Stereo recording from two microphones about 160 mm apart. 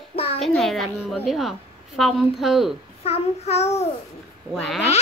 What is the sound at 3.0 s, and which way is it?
Child singing, 40° left (ahead or behind).